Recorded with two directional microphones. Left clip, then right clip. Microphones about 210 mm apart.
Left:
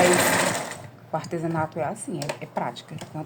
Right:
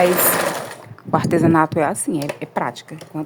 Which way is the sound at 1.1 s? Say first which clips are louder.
Right 12 dB; 40° right (ahead or behind).